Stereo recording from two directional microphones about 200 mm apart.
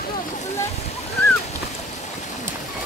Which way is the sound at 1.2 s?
10° left (ahead or behind).